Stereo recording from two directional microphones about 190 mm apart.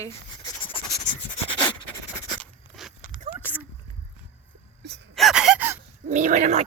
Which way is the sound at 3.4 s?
10° left (ahead or behind).